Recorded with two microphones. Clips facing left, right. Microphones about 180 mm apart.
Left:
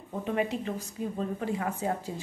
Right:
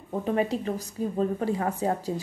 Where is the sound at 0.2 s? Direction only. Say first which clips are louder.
Right 3 dB; 35° right (ahead or behind).